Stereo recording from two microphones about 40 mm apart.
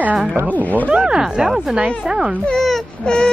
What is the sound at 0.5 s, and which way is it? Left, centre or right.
Speech, left.